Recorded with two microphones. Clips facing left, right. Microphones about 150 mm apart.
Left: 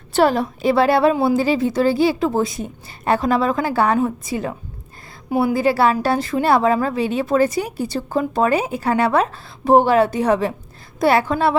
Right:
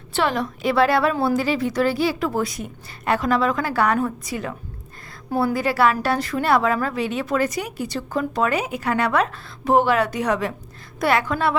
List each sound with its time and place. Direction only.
0.1 s a woman's voice: 40° left (ahead or behind)
5.3 s a woman's voice: 15° left (ahead or behind)
5.5 s a woman's voice: 30° left (ahead or behind)